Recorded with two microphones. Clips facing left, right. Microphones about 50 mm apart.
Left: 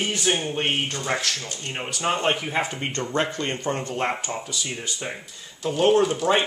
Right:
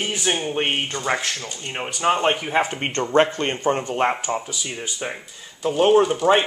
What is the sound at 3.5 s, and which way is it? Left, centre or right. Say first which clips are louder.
Speech: right 5 dB; right.